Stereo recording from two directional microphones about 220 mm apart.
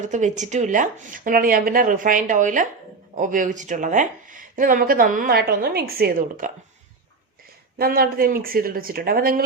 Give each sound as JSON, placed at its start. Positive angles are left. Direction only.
{"t": 0.0, "sound": "speech", "side_deg": -35}
{"t": 7.8, "sound": "speech", "side_deg": -45}